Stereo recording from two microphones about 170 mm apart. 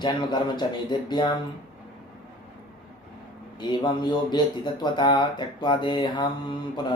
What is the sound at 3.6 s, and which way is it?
Speech, 25° left (ahead or behind).